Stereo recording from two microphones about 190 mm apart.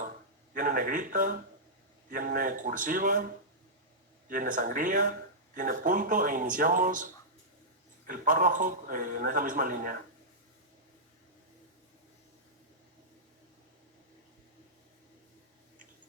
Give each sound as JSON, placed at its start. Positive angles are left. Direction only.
{"t": 0.5, "sound": "a man's voice", "side_deg": -45}